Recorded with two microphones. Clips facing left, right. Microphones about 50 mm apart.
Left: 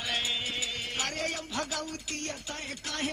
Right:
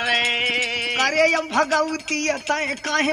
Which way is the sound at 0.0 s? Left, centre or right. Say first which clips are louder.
Right 12 dB; right.